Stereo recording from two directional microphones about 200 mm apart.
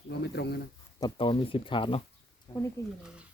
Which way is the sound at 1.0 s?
25° left (ahead or behind).